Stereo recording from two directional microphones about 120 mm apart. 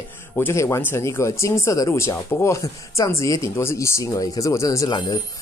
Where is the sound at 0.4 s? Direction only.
25° left (ahead or behind).